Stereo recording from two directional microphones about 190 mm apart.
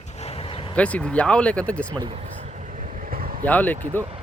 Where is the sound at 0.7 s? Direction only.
5° left (ahead or behind).